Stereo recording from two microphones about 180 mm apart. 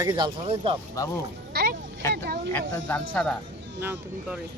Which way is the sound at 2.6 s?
90° right.